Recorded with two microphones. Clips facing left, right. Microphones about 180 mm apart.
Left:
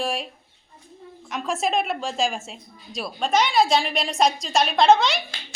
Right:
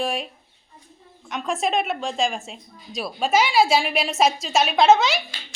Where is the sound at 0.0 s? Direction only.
Centre (ahead or behind).